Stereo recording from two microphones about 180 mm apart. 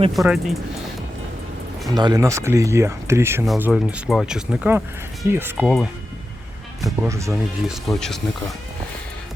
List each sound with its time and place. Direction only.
0.1 s speech: centre (ahead or behind)
1.9 s speech: 20° right (ahead or behind)
6.8 s speech: 15° right (ahead or behind)
7.7 s speech: centre (ahead or behind)